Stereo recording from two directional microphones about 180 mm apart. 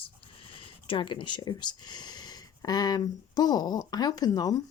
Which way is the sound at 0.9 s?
25° left (ahead or behind).